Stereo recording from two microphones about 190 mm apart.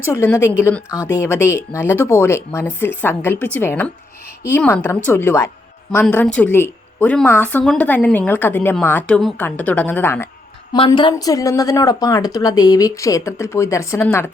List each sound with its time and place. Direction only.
0.0 s a woman's voice: 10° left (ahead or behind)
10.7 s speech: 25° left (ahead or behind)